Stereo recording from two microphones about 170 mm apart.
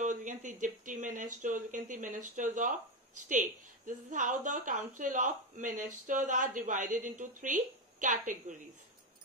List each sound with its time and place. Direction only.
0.0 s a woman's voice: 50° right (ahead or behind)